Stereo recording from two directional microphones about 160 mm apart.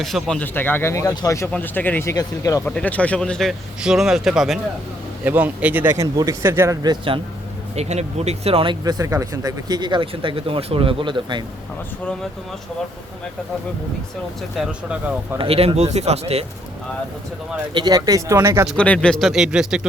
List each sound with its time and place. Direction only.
0.0 s speech: centre (ahead or behind); by 1.5 s 20° left (ahead or behind)
1.5 s speech: 10° left (ahead or behind)
2.6 s speech: 10° left (ahead or behind); by 7.2 s 30° right (ahead or behind)
7.8 s speech: 45° right (ahead or behind)
14.6 s speech: 5° right (ahead or behind)
15.4 s speech: 35° right (ahead or behind)
17.7 s speech: 25° right (ahead or behind)
18.8 s speech: 5° left (ahead or behind)